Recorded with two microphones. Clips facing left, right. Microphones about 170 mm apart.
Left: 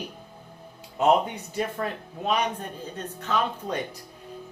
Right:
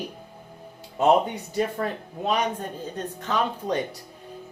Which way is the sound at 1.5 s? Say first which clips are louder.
Right 3 dB; 40° right (ahead or behind).